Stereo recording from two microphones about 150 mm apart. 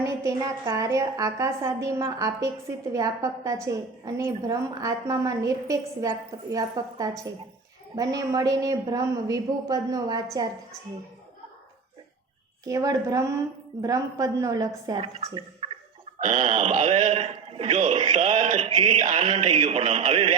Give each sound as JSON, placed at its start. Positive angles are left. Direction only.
{"t": 0.0, "sound": "a woman's voice", "side_deg": -20}
{"t": 12.6, "sound": "a woman's voice", "side_deg": -20}
{"t": 15.0, "sound": "speech", "side_deg": -40}
{"t": 16.2, "sound": "a man's voice", "side_deg": -50}